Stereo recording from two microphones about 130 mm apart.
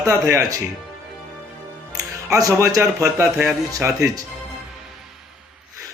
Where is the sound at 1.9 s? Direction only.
25° right (ahead or behind).